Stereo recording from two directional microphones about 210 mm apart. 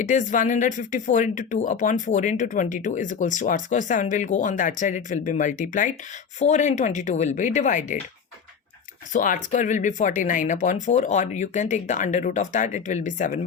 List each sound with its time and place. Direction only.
0.0 s speech: 35° left (ahead or behind)
9.1 s speech: 40° left (ahead or behind)